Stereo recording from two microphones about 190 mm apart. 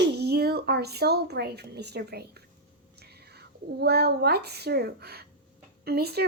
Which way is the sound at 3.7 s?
60° right (ahead or behind).